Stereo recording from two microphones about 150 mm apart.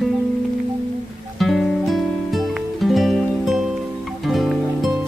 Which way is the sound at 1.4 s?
Centre (ahead or behind).